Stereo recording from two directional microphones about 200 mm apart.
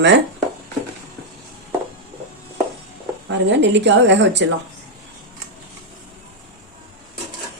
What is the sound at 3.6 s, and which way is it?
Speech, 60° right (ahead or behind).